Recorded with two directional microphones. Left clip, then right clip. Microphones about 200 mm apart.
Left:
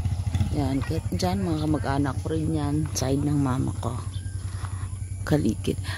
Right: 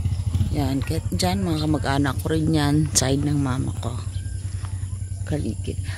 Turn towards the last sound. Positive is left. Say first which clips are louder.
# left 4 dB
turn(degrees=35)  # may be behind; listen again after turning